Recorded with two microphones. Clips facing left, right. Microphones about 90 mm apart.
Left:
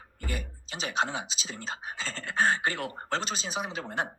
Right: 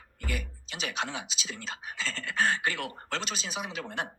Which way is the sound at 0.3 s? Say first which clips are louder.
Even; 30° left (ahead or behind).